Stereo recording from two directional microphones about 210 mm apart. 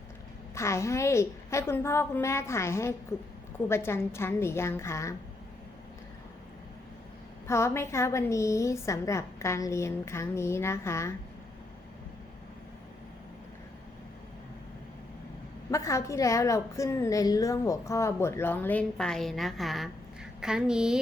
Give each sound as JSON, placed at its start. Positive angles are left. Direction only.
{"t": 0.5, "sound": "a woman's voice", "side_deg": 15}
{"t": 7.4, "sound": "a woman's voice", "side_deg": 15}
{"t": 15.7, "sound": "a woman's voice", "side_deg": 15}